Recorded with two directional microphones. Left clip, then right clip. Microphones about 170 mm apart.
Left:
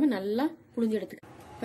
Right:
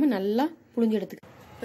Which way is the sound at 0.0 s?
35° right (ahead or behind).